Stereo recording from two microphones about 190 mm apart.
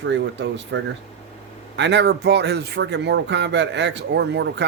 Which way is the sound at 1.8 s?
65° right (ahead or behind).